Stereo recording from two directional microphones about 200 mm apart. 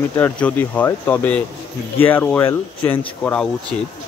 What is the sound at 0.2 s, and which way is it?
Speech, 10° left (ahead or behind).